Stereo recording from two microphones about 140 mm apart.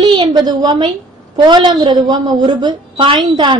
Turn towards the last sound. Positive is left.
turn(degrees=-30)  # may be behind; listen again after turning